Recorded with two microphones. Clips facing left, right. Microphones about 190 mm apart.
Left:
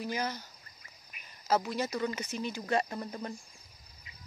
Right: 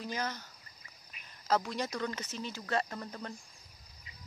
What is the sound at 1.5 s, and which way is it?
Speech, 5° left (ahead or behind).